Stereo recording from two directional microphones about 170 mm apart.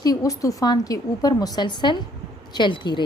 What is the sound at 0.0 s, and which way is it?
Speech, 20° left (ahead or behind).